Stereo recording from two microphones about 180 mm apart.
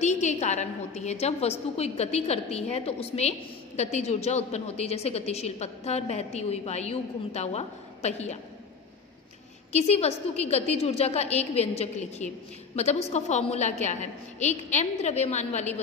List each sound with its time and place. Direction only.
0.0 s a woman's voice: 40° left (ahead or behind)
9.7 s a woman's voice: 35° left (ahead or behind)